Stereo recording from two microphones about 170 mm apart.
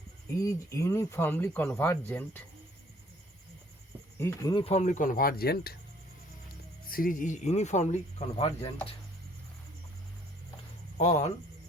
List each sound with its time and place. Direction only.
0.3 s speech: 20° left (ahead or behind)
4.2 s speech: 15° left (ahead or behind)
4.5 s speech: 40° left (ahead or behind); by 5.7 s 65° left (ahead or behind)
6.8 s speech: 55° left (ahead or behind)
10.9 s speech: 45° left (ahead or behind)